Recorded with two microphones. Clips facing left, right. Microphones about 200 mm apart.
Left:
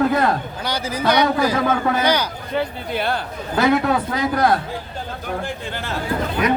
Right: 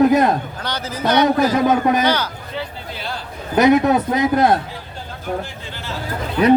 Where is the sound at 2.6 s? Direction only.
60° left (ahead or behind).